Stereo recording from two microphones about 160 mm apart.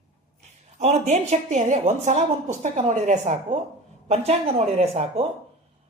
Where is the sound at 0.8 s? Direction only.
45° right (ahead or behind).